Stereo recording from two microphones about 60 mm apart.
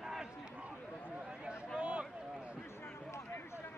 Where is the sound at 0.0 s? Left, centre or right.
Centre.